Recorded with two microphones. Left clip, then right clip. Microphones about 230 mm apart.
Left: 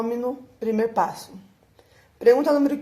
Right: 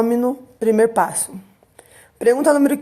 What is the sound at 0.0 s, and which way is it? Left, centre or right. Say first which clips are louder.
Speech: right 8 dB; right.